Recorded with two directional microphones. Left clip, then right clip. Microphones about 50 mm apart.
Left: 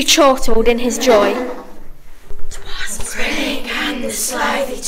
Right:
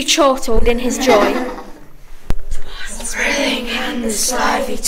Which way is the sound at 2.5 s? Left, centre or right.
Left.